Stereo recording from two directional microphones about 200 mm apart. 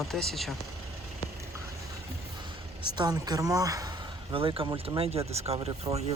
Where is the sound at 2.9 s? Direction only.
20° right (ahead or behind).